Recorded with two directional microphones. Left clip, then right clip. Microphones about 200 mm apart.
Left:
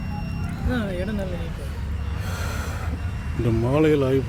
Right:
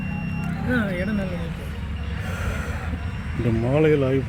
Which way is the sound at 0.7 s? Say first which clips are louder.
Right 3 dB; 20° right (ahead or behind).